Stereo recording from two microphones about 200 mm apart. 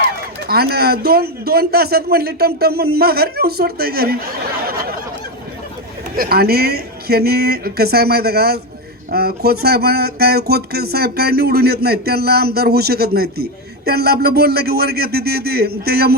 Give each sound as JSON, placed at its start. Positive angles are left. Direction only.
{"t": 0.4, "sound": "speech", "side_deg": -50}
{"t": 6.1, "sound": "speech", "side_deg": -50}